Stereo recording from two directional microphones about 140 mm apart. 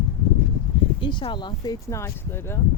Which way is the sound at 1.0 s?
35° left (ahead or behind).